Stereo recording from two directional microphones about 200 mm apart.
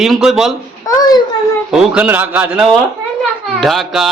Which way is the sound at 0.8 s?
20° left (ahead or behind).